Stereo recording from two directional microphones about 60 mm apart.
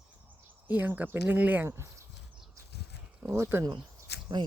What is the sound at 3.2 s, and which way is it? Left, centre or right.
Speech, right.